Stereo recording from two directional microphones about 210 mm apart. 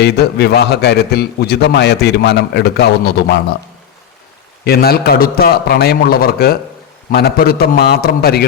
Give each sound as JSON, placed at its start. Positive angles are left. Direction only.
{"t": 0.0, "sound": "a man's voice", "side_deg": 50}
{"t": 4.6, "sound": "a man's voice", "side_deg": 45}